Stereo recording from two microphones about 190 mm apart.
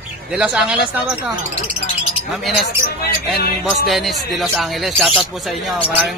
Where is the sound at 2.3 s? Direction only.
Centre (ahead or behind).